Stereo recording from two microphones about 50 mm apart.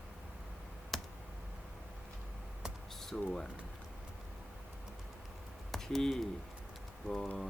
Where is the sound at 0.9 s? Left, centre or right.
Centre.